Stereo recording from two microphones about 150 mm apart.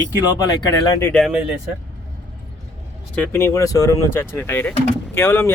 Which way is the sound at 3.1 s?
15° left (ahead or behind).